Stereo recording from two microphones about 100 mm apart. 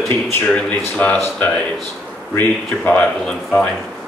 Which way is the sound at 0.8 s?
20° left (ahead or behind).